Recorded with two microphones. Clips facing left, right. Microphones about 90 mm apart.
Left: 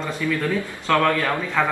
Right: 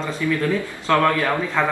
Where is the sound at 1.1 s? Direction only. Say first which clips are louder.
Right 2 dB; 15° right (ahead or behind).